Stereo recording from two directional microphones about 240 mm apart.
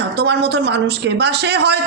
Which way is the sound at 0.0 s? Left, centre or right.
Right.